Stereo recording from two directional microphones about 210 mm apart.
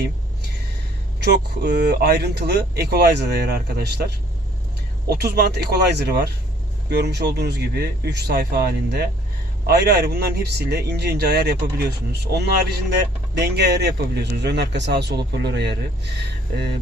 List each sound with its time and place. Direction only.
1.2 s speech: 50° right (ahead or behind)